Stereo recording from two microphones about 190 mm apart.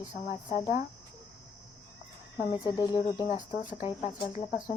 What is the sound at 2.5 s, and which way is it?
Speech, 20° left (ahead or behind).